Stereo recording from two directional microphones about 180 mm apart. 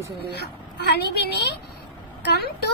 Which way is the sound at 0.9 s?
65° left (ahead or behind).